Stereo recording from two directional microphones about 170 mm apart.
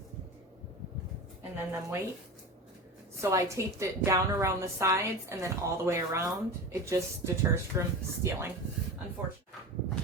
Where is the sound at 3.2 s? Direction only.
20° right (ahead or behind).